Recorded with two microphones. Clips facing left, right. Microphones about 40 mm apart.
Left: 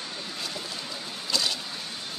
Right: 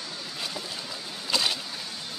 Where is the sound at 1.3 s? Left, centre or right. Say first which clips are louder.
Right 2 dB; right.